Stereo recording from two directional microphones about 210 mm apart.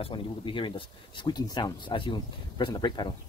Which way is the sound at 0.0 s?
25° left (ahead or behind).